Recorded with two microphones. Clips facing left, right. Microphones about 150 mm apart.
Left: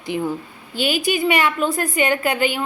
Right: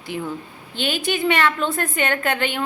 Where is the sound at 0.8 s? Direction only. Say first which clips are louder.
Left 3 dB; 10° left (ahead or behind).